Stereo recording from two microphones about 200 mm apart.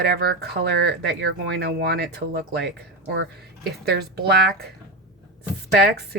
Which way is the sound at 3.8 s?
55° right (ahead or behind).